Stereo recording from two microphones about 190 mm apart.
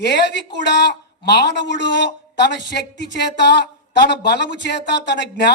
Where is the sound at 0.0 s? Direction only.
60° left (ahead or behind).